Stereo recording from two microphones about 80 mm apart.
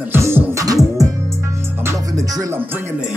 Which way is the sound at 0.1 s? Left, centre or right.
Right.